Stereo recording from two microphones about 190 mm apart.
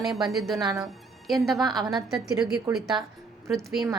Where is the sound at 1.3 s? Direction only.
Centre (ahead or behind).